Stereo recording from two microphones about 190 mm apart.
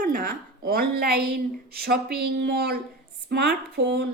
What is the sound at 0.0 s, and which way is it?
A woman's voice, 45° right (ahead or behind).